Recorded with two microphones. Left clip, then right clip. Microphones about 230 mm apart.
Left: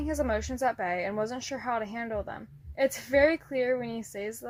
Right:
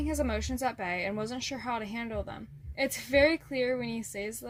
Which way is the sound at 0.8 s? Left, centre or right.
Right.